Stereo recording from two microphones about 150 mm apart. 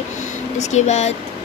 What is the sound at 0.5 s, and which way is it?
Speech, 50° left (ahead or behind).